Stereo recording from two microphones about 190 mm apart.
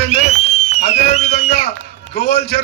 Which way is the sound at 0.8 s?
35° left (ahead or behind).